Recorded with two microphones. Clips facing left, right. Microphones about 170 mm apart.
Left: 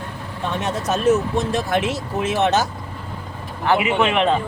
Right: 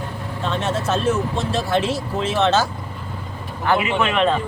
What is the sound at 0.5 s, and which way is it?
Speech, 15° left (ahead or behind).